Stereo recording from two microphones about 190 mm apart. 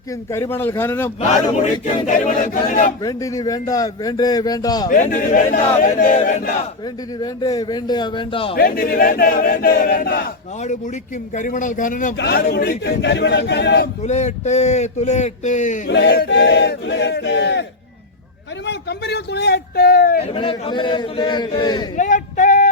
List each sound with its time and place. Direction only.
0.3 s a man's voice: 15° left (ahead or behind)
1.5 s speech: 40° left (ahead or behind)
2.0 s a sound: 45° left (ahead or behind)
3.0 s a man's voice: 20° left (ahead or behind)
4.9 s speech: 45° left (ahead or behind)
7.2 s a man's voice: 20° left (ahead or behind)
8.5 s a sound: 50° left (ahead or behind)
11.3 s a sound: 40° left (ahead or behind)
12.1 s battle cry: 60° left (ahead or behind)
14.0 s speech: 40° left (ahead or behind)
15.9 s battle cry: 65° left (ahead or behind)
20.2 s a man's voice: 30° left (ahead or behind)
21.9 s a sound: 40° left (ahead or behind)